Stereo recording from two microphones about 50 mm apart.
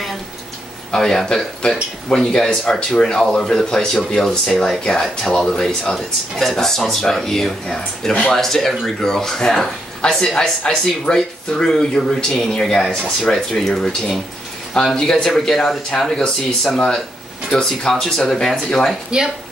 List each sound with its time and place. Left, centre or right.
0.9 s speech: centre
19.0 s speech: centre